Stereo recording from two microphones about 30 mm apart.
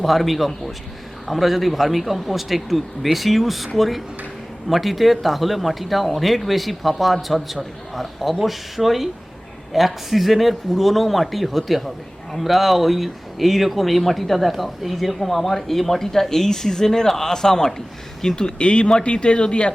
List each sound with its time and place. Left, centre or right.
0.0 s a man's voice: centre; by 18.5 s left
18.6 s speech: left